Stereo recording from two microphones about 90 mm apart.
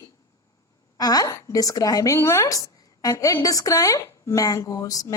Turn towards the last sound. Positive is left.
turn(degrees=40)  # may be behind; listen again after turning